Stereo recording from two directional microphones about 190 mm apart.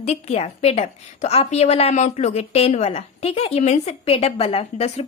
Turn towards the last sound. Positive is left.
turn(degrees=35)  # may be behind; listen again after turning